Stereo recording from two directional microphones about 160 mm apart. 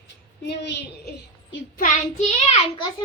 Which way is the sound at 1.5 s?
55° left (ahead or behind).